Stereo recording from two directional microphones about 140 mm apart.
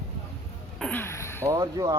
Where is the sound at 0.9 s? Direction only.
15° left (ahead or behind).